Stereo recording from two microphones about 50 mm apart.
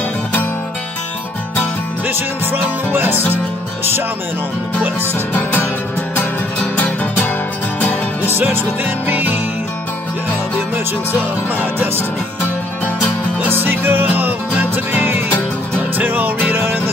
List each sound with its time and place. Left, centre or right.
2.0 s music: right
6.6 s music: left
8.4 s music: right
11.1 s music: right
13.5 s music: right
16.6 s music: right